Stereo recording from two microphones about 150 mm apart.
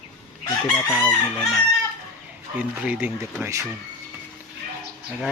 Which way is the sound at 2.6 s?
10° right (ahead or behind).